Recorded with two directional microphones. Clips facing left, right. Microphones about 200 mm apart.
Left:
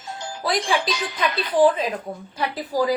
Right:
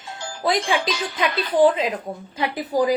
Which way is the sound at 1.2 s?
20° right (ahead or behind).